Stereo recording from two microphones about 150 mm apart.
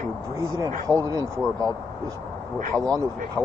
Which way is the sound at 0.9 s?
25° right (ahead or behind).